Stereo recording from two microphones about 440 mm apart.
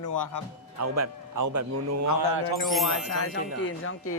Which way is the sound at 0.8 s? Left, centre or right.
Right.